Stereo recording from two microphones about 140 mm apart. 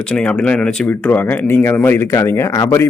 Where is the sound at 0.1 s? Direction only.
10° left (ahead or behind).